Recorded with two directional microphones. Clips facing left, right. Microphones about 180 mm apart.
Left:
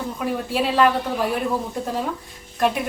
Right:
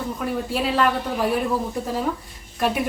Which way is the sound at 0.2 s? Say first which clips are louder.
Left 2 dB; 5° left (ahead or behind).